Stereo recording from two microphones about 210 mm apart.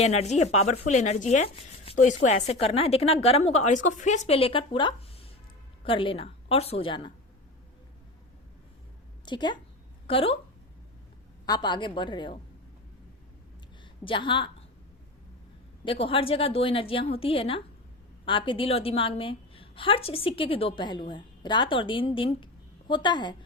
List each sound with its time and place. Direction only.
0.0 s a woman's voice: 30° left (ahead or behind)
9.2 s a woman's voice: 20° left (ahead or behind)
11.4 s a woman's voice: 20° left (ahead or behind)
14.0 s a woman's voice: 25° left (ahead or behind)
15.8 s a woman's voice: 25° left (ahead or behind)